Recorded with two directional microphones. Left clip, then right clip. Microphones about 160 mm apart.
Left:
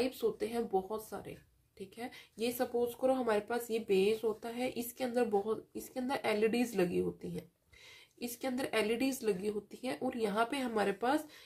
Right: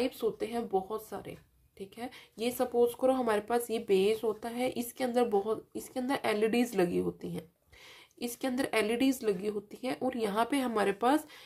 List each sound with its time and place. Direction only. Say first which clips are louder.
0.0 s speech: right 2 dB; 20° right (ahead or behind); by 11.2 s 40° right (ahead or behind)